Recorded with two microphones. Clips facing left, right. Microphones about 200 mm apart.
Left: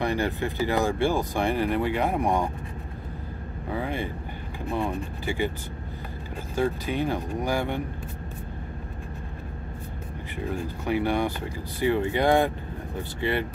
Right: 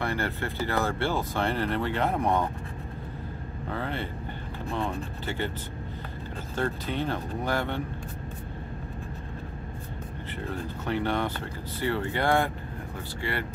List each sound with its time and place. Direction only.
0.0 s speech: 15° left (ahead or behind)
3.6 s speech: 10° left (ahead or behind)
6.5 s speech: 10° left (ahead or behind)
10.4 s speech: 10° left (ahead or behind)